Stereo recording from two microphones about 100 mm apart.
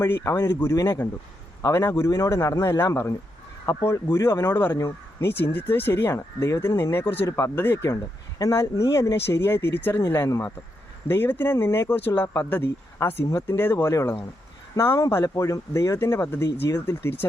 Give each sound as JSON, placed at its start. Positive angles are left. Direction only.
{"t": 0.1, "sound": "speech", "side_deg": 25}
{"t": 7.3, "sound": "speech", "side_deg": 30}
{"t": 7.6, "sound": "speech", "side_deg": 20}
{"t": 8.4, "sound": "speech", "side_deg": 35}